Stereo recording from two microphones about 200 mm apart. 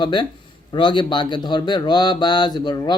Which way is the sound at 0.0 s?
25° left (ahead or behind).